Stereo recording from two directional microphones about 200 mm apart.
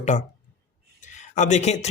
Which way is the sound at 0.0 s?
35° left (ahead or behind).